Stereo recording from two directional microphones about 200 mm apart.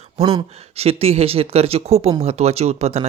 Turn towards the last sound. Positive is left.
turn(degrees=-30)  # may be behind; listen again after turning